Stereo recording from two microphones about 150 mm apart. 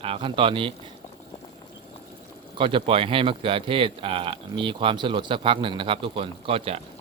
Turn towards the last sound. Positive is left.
turn(degrees=-40)  # may be behind; listen again after turning